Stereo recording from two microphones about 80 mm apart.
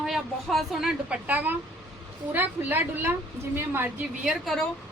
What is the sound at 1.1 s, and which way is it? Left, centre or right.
A woman's voice, centre.